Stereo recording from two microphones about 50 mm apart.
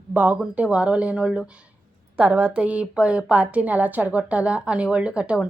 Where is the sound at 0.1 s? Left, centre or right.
Right.